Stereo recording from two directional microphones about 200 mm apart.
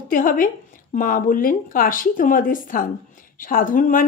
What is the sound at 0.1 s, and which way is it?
Speech, 45° left (ahead or behind).